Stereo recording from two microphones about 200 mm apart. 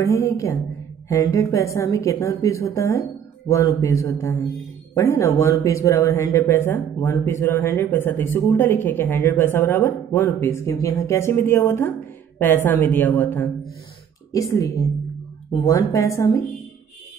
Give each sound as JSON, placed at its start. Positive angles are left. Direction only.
{"t": 0.0, "sound": "speech", "side_deg": 15}